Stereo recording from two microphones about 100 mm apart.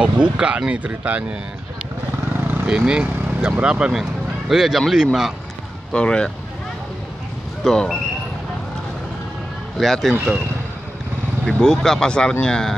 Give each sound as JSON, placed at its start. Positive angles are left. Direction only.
{"t": 0.0, "sound": "speech", "side_deg": -10}
{"t": 2.4, "sound": "vehicle", "side_deg": -20}
{"t": 2.7, "sound": "speech", "side_deg": -10}
{"t": 5.9, "sound": "speech", "side_deg": 10}
{"t": 7.6, "sound": "speech", "side_deg": 5}
{"t": 9.8, "sound": "speech", "side_deg": 0}
{"t": 11.4, "sound": "speech", "side_deg": 5}